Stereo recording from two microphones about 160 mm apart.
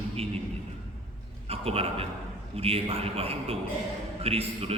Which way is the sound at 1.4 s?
40° right (ahead or behind).